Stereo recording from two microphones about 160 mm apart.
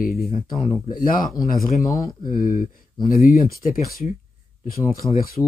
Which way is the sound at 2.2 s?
55° left (ahead or behind).